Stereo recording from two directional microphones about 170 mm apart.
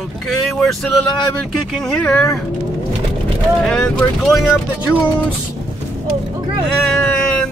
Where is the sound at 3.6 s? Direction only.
5° left (ahead or behind).